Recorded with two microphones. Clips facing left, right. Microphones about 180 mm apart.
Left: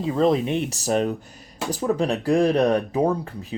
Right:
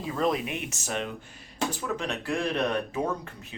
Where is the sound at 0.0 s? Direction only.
25° left (ahead or behind).